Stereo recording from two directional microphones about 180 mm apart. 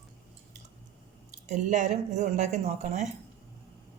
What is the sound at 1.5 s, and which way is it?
Speech, 40° right (ahead or behind).